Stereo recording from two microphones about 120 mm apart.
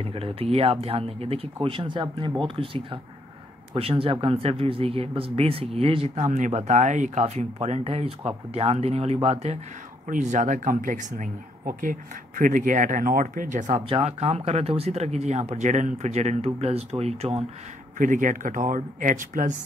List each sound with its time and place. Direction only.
0.0 s speech: 55° right (ahead or behind)
6.1 s speech: 85° right
7.6 s speech: 60° right (ahead or behind)
10.0 s speech: 90° right
13.8 s speech: 45° right (ahead or behind)
14.2 s speech: 65° right (ahead or behind)
17.9 s speech: 90° right